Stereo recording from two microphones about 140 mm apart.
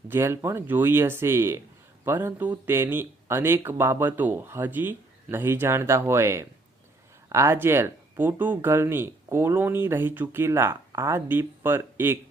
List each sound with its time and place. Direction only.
0.1 s speech: 15° right (ahead or behind)